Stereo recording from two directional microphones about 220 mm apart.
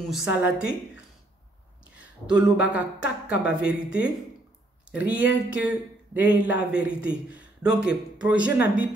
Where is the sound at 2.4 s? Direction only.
5° right (ahead or behind).